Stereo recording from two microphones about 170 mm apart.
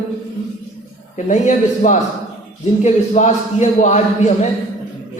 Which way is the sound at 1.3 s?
45° left (ahead or behind).